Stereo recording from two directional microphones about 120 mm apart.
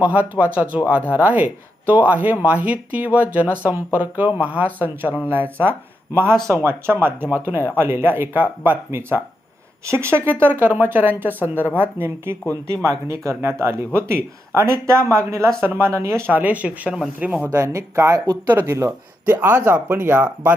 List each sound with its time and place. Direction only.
0.0 s speech: 10° right (ahead or behind)
17.6 s speech: 25° right (ahead or behind)